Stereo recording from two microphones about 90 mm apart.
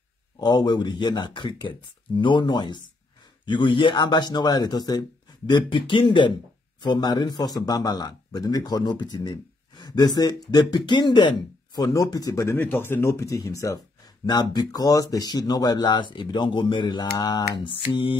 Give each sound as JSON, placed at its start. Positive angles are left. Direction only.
{"t": 0.4, "sound": "a man's voice", "side_deg": 55}
{"t": 5.5, "sound": "speech", "side_deg": 60}
{"t": 6.8, "sound": "a man's voice", "side_deg": 55}
{"t": 12.5, "sound": "speech", "side_deg": 20}
{"t": 14.2, "sound": "a man's voice", "side_deg": 50}
{"t": 17.6, "sound": "a sound", "side_deg": 65}